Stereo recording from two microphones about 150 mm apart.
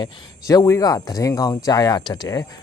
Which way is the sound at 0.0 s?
25° left (ahead or behind).